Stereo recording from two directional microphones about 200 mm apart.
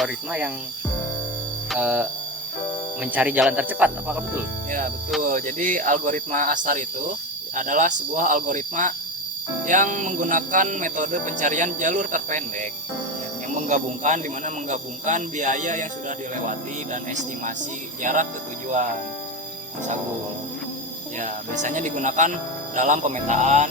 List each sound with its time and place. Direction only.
0.0 s speech: 5° right (ahead or behind)
1.7 s speech: 5° right (ahead or behind)
5.2 s speech: 40° right (ahead or behind)
18.0 s speech: 40° right (ahead or behind)
21.2 s speech: 40° right (ahead or behind)